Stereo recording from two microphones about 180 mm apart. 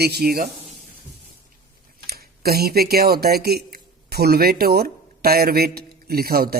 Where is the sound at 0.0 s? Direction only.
60° right (ahead or behind).